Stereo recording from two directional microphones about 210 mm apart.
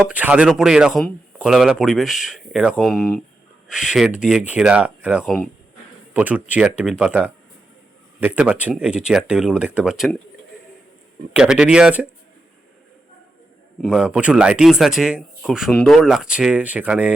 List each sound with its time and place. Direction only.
0.1 s speech: 5° right (ahead or behind)
11.3 s speech: 5° right (ahead or behind)
13.8 s speech: 5° right (ahead or behind)